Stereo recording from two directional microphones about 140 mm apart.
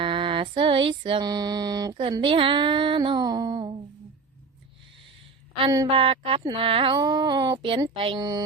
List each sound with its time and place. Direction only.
0.0 s music: 40° right (ahead or behind)
2.1 s speech: 40° right (ahead or behind)
5.9 s speech: 40° right (ahead or behind)